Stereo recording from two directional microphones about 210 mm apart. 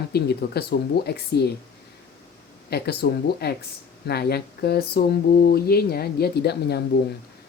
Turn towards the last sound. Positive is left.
turn(degrees=50)  # may be behind; listen again after turning